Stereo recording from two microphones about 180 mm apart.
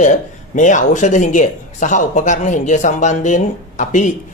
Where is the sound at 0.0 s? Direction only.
45° left (ahead or behind).